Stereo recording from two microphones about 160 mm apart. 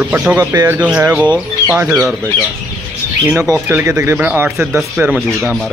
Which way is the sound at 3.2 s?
10° right (ahead or behind).